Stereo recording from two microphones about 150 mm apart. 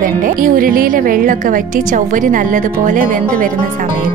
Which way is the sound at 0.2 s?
65° right (ahead or behind).